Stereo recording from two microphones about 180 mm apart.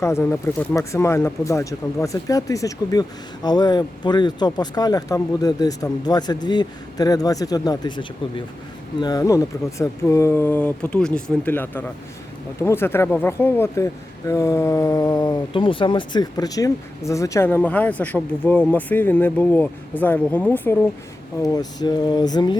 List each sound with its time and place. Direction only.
0.0 s speech: 15° left (ahead or behind)
21.4 s speech: 20° left (ahead or behind)